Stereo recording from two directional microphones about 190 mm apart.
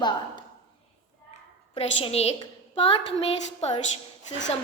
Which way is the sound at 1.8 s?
35° left (ahead or behind).